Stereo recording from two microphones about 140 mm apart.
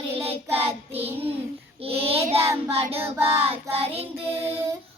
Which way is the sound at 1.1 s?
15° right (ahead or behind).